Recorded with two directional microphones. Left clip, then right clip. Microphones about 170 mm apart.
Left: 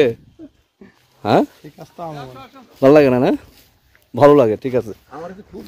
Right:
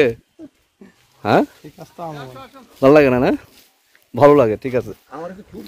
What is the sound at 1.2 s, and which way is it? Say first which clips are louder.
Speech: even; 10° left (ahead or behind).